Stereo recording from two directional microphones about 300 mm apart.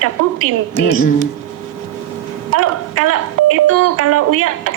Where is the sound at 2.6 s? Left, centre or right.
Right.